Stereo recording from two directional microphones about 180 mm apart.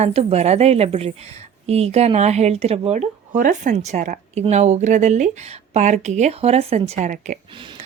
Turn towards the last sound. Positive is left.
turn(degrees=-45)  # may be behind; listen again after turning